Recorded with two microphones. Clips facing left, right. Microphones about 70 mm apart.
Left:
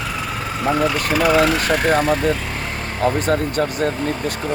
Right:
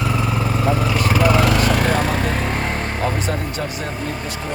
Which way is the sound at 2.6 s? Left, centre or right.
Right.